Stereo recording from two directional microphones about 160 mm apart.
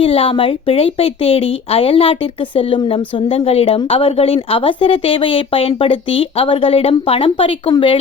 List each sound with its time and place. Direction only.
0.0 s a woman's voice: 35° left (ahead or behind)